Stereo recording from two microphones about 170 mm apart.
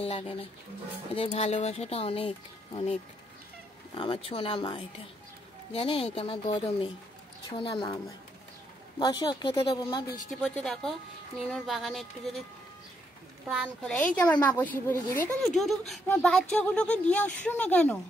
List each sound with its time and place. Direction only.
0.0 s speech: 35° left (ahead or behind)
9.0 s speech: 25° left (ahead or behind)
10.4 s speech: centre (ahead or behind)
13.5 s speech: 5° right (ahead or behind)
13.9 s speech: 10° left (ahead or behind)